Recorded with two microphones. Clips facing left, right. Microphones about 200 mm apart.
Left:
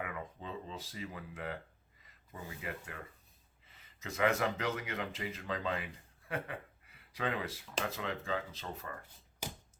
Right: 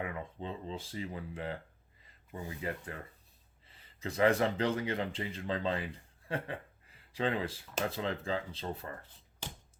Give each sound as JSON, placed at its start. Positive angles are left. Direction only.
{"t": 0.0, "sound": "speech", "side_deg": -30}